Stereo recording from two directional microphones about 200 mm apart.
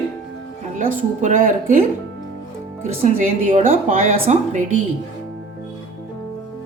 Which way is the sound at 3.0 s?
40° right (ahead or behind).